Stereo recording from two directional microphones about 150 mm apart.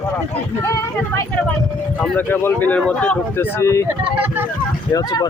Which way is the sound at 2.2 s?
10° left (ahead or behind).